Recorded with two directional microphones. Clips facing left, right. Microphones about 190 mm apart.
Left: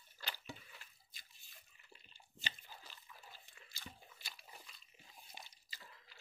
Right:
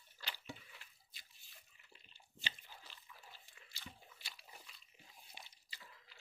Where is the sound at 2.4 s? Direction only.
45° left (ahead or behind).